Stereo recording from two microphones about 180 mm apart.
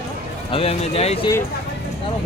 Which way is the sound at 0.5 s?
35° left (ahead or behind).